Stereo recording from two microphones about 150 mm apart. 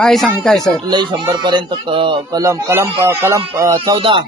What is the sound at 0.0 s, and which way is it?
Speech, centre (ahead or behind).